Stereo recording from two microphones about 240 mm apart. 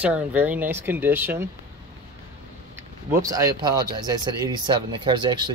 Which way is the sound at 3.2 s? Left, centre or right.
Centre.